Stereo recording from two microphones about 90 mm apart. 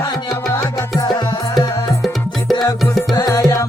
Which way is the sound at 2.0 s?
Centre (ahead or behind).